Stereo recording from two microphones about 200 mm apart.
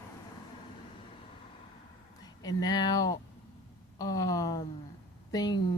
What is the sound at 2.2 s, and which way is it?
Speech, 20° left (ahead or behind).